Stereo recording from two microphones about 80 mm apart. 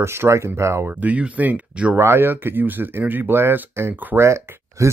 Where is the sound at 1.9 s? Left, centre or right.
Right.